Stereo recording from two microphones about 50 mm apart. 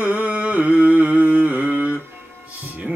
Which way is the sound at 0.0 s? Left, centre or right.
Right.